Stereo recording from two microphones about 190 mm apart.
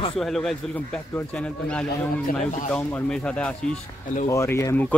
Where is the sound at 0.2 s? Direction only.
Centre (ahead or behind).